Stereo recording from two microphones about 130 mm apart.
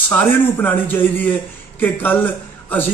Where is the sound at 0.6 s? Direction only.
15° left (ahead or behind).